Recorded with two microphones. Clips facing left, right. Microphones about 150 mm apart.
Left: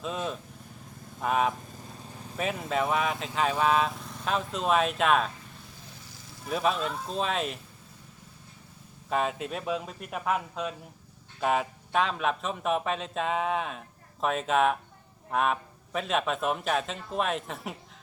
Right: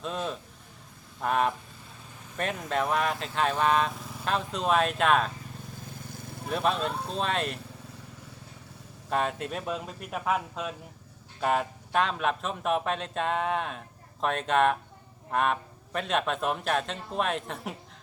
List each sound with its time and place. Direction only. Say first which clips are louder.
0.0 s speech: even; centre (ahead or behind)
6.0 s vehicle: right 8 dB; 55° right (ahead or behind)
6.5 s speech: even; centre (ahead or behind)
9.0 s speech: even; centre (ahead or behind)